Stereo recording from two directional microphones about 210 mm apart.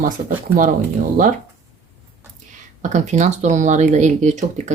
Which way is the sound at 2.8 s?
35° right (ahead or behind).